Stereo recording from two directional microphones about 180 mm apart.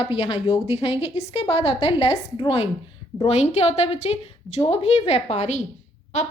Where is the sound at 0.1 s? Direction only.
35° left (ahead or behind).